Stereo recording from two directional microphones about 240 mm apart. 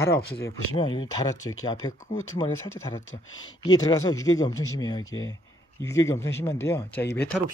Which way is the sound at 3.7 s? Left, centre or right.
Centre.